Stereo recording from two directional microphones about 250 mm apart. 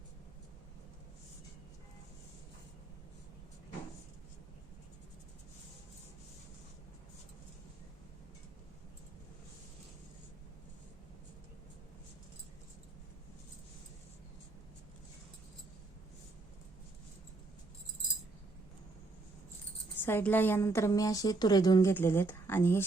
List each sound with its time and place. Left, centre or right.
20.1 s a woman's voice: centre